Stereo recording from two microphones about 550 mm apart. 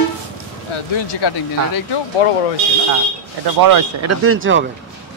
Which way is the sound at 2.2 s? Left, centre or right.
Left.